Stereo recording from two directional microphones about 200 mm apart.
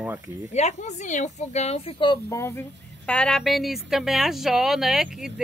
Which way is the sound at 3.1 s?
5° left (ahead or behind).